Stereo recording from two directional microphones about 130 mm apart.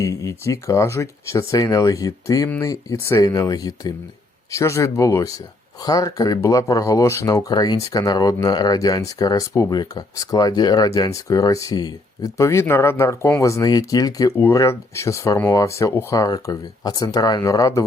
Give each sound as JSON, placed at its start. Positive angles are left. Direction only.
{"t": 0.0, "sound": "speech", "side_deg": 25}